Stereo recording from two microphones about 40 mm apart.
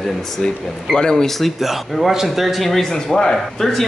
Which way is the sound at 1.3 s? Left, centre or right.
Centre.